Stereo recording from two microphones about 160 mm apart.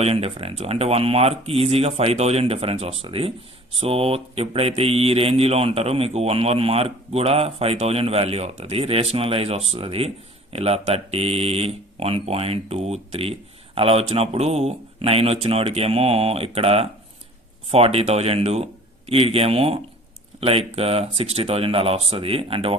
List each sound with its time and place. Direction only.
0.0 s speech: 40° right (ahead or behind)